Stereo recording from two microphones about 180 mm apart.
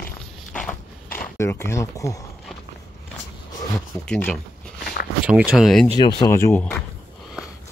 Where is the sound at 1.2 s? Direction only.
15° left (ahead or behind).